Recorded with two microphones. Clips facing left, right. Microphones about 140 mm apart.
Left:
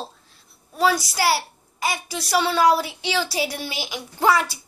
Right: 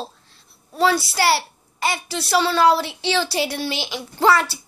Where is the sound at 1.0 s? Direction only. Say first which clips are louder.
Right 2 dB; 70° right (ahead or behind).